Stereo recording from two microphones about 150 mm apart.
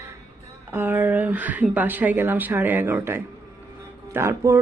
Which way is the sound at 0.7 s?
15° right (ahead or behind).